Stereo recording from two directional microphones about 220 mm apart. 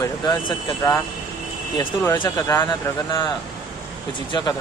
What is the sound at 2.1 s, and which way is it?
Speech, 15° left (ahead or behind).